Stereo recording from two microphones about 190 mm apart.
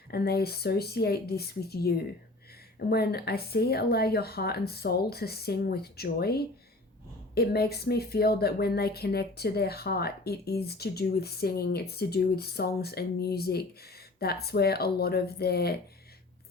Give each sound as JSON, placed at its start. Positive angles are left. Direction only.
{"t": 0.1, "sound": "speech", "side_deg": 55}